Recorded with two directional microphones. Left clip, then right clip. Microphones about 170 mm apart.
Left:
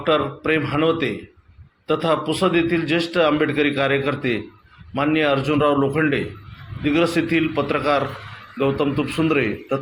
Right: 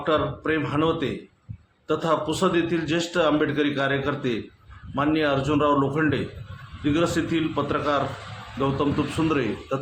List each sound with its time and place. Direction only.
0.0 s a man's voice: 10° left (ahead or behind)